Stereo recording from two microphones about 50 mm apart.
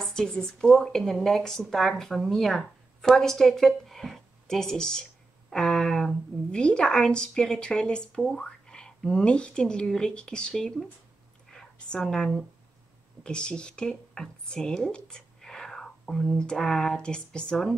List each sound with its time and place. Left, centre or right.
0.1 s a woman's voice: centre